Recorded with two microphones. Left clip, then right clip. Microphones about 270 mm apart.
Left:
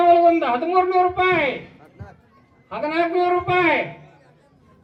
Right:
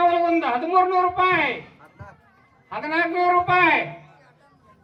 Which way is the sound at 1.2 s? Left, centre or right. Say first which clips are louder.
Left 1 dB; centre.